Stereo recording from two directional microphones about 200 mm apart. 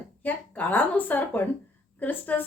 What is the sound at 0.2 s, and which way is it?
A woman's voice, 10° left (ahead or behind).